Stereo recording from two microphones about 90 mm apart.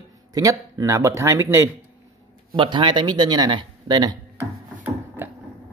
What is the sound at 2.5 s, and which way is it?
A man's voice, 70° right (ahead or behind).